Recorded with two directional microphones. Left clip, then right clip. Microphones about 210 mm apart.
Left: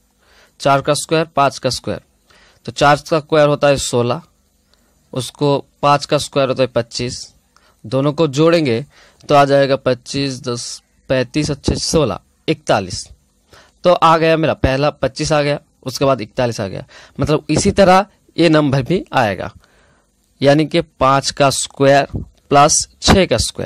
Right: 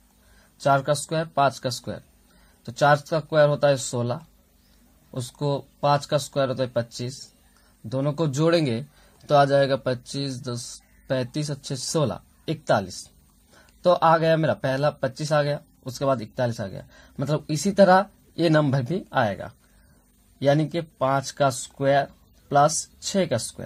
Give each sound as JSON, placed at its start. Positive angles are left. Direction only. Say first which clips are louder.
{"t": 0.6, "sound": "a man's voice", "louder": "left 7 dB", "side_deg": 35}